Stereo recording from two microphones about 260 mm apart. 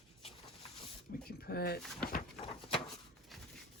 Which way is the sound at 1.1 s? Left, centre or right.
Left.